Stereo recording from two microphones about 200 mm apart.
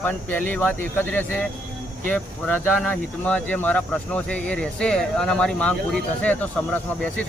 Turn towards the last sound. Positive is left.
turn(degrees=5)  # may be behind; listen again after turning